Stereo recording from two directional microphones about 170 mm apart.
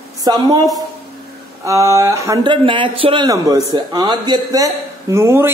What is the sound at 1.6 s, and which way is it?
A man's voice, 20° right (ahead or behind).